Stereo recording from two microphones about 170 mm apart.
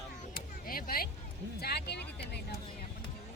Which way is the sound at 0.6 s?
60° left (ahead or behind).